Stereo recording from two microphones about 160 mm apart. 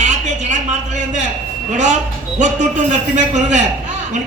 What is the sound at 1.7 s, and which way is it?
A man's voice, 50° right (ahead or behind).